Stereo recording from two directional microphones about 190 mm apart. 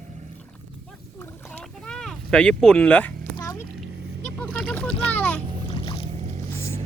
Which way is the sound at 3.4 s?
20° left (ahead or behind).